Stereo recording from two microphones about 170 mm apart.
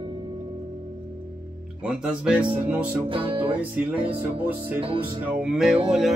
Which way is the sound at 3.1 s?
30° right (ahead or behind).